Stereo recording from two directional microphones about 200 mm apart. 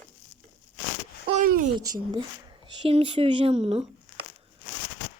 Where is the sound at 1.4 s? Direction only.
45° right (ahead or behind).